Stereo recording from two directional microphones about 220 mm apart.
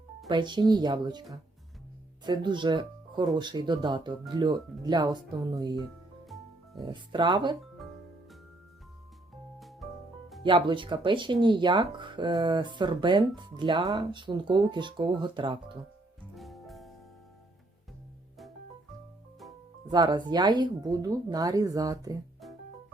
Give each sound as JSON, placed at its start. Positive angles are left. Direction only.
{"t": 0.3, "sound": "speech", "side_deg": -20}
{"t": 6.2, "sound": "music", "side_deg": 0}
{"t": 6.8, "sound": "speech", "side_deg": -20}
{"t": 9.6, "sound": "music", "side_deg": 0}
{"t": 10.4, "sound": "speech", "side_deg": -20}
{"t": 16.3, "sound": "music", "side_deg": 0}
{"t": 19.9, "sound": "speech", "side_deg": -20}